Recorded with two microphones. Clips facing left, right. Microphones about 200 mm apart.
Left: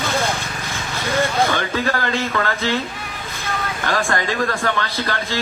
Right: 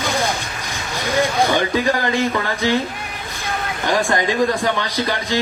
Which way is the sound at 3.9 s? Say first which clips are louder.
Right 3 dB; 15° right (ahead or behind).